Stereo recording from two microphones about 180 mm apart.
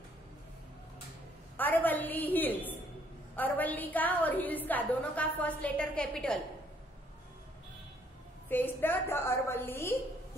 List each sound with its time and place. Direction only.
1.6 s a woman's voice: 10° left (ahead or behind)
8.5 s a woman's voice: 10° left (ahead or behind)